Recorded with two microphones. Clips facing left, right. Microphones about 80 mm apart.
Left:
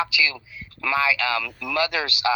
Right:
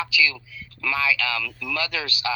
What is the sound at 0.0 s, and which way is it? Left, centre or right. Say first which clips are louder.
Speech: even; left.